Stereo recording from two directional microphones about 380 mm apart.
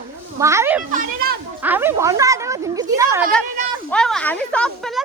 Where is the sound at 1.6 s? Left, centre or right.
Centre.